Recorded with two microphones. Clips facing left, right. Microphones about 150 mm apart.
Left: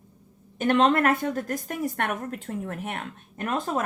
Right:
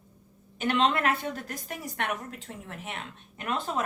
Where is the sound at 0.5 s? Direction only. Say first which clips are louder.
Left 5 dB; 45° left (ahead or behind).